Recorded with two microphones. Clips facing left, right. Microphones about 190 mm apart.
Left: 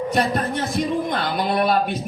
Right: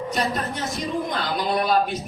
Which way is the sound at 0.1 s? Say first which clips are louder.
Left 4 dB; 55° left (ahead or behind).